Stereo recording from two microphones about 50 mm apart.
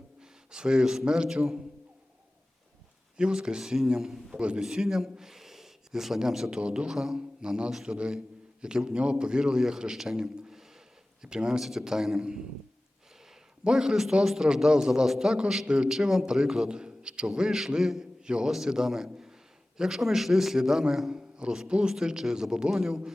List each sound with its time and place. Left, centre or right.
0.2 s a man's voice: centre
3.2 s a man's voice: centre
4.4 s a man's voice: right
6.9 s a man's voice: centre
13.7 s a man's voice: centre
15.9 s a man's voice: centre